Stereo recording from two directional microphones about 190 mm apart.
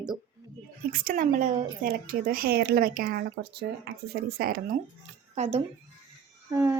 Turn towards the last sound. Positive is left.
turn(degrees=-15)  # may be behind; listen again after turning